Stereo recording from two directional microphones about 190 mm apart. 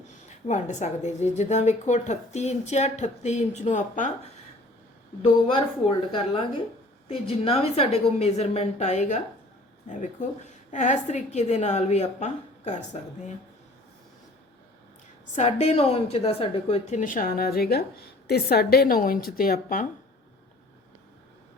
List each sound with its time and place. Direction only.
0.3 s a woman's voice: 40° left (ahead or behind)
5.2 s a woman's voice: 25° left (ahead or behind)
15.4 s a woman's voice: 35° left (ahead or behind)